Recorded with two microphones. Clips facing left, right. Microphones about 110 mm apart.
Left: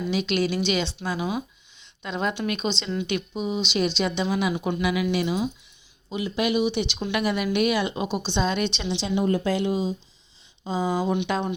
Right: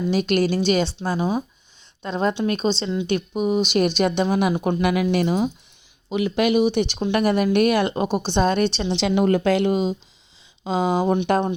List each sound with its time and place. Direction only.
0.1 s a woman's voice: 45° right (ahead or behind)
3.3 s a woman's voice: 50° right (ahead or behind)
6.1 s a woman's voice: 65° right (ahead or behind); by 9.0 s 40° right (ahead or behind)
9.0 s speech: 75° right (ahead or behind)
11.1 s a woman's voice: 45° right (ahead or behind)